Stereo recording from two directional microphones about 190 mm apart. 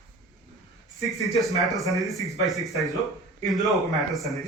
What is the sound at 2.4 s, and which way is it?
Speech, centre (ahead or behind).